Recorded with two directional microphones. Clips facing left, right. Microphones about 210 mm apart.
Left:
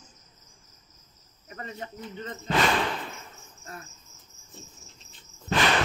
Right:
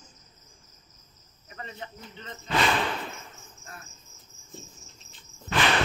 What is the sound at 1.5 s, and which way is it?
Speech, 40° left (ahead or behind).